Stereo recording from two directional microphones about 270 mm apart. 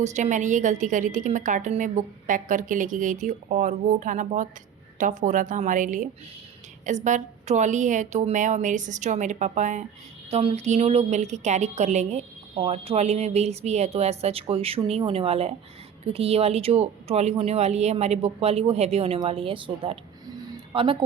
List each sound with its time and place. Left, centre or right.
0.0 s a woman's voice: right